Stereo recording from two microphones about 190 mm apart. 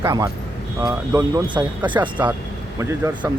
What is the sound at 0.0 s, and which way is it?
Speech, 20° right (ahead or behind).